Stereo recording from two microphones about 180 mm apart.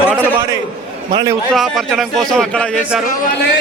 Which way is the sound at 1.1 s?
20° right (ahead or behind).